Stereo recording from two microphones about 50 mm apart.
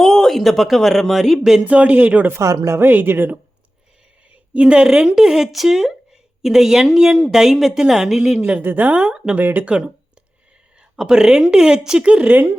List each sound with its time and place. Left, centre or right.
0.0 s speech: centre
1.6 s speech: right
2.4 s speech: right
2.9 s speech: right
4.5 s speech: right
4.9 s a woman's voice: centre
8.6 s speech: right
8.9 s speech: centre
9.4 s speech: right
9.6 s speech: right